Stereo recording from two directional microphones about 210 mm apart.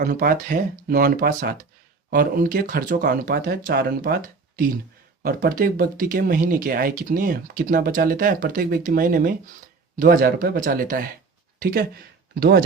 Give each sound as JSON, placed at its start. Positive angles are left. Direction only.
{"t": 0.0, "sound": "speech", "side_deg": -45}